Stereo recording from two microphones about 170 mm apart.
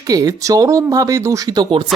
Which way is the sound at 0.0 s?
20° right (ahead or behind).